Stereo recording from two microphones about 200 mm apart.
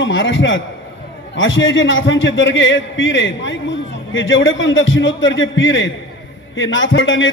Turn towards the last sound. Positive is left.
turn(degrees=70)  # may be behind; listen again after turning